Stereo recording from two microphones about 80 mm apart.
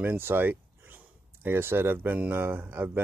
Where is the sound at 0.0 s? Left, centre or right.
Right.